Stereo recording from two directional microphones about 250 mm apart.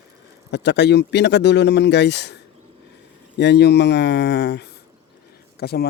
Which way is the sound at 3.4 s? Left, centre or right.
Left.